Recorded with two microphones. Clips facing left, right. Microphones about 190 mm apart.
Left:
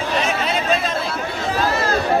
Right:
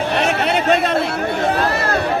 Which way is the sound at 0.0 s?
65° right (ahead or behind).